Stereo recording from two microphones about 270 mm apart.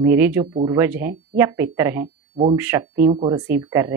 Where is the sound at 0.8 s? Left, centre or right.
Centre.